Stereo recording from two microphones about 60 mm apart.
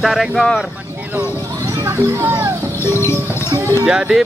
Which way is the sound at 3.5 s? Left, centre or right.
Right.